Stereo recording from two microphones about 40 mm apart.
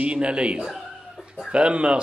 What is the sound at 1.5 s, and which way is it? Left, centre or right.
Speech, right.